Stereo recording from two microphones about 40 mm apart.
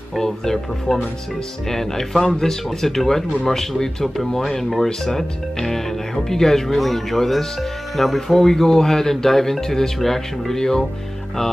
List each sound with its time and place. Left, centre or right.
0.1 s speech: centre
2.2 s speech: left
2.8 s speech: centre